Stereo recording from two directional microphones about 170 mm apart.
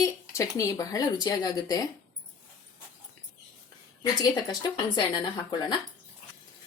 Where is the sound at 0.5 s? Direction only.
20° left (ahead or behind).